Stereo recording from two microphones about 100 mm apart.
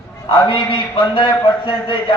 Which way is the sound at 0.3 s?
55° left (ahead or behind).